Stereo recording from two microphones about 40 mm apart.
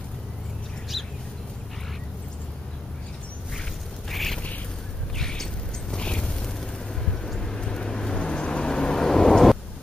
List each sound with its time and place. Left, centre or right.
0.9 s bird: centre
4.1 s a sound: centre; by 6.3 s left
7.1 s vehicle: centre